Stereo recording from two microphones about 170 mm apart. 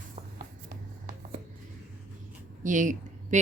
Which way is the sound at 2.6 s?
50° right (ahead or behind).